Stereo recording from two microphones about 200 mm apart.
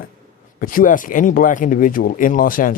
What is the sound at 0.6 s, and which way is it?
Speech, 45° left (ahead or behind).